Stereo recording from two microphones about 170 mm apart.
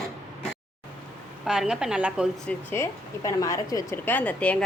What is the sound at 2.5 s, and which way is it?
Speech, 15° left (ahead or behind).